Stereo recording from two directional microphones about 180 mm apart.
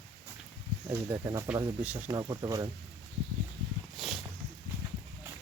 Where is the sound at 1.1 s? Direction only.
20° right (ahead or behind).